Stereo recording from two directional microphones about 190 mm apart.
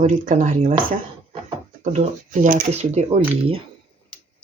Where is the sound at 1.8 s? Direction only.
40° right (ahead or behind).